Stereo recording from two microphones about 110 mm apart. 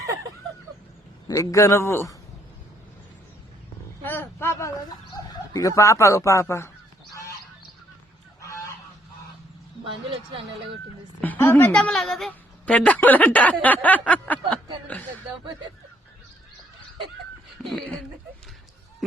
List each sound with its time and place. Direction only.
0.0 s a sound: 30° right (ahead or behind)
1.3 s a man's voice: 30° left (ahead or behind)
4.0 s chicken: 20° left (ahead or behind)
9.8 s a sound: 55° right (ahead or behind)
11.2 s a woman's voice: 20° left (ahead or behind)
17.6 s speech: 5° left (ahead or behind)